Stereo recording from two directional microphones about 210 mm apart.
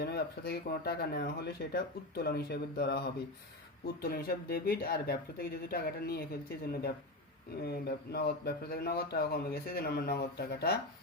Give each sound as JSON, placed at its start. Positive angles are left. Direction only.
{"t": 0.0, "sound": "speech", "side_deg": 50}
{"t": 7.5, "sound": "speech", "side_deg": 45}